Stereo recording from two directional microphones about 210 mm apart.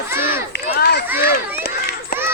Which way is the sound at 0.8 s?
50° left (ahead or behind).